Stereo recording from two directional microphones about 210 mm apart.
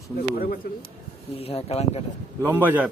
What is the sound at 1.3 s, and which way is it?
Speech, 30° left (ahead or behind).